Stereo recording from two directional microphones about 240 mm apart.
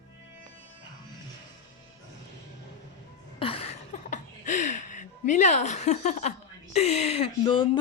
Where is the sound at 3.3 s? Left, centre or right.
Left.